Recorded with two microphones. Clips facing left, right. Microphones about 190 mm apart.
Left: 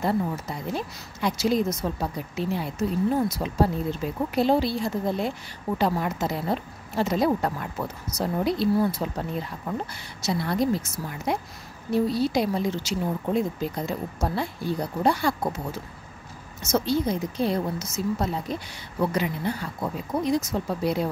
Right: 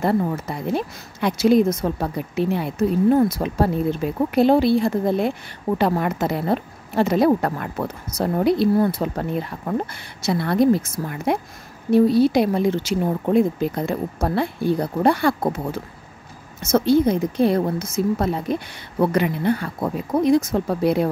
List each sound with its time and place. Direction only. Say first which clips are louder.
0.0 s speech: right 5 dB; 60° right (ahead or behind)